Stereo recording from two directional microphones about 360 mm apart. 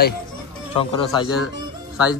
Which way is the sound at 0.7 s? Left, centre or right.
Centre.